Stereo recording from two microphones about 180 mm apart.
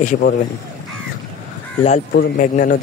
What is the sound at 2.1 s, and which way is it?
Speech, 65° left (ahead or behind).